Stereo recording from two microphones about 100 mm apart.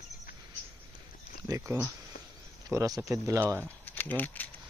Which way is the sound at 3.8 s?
20° left (ahead or behind).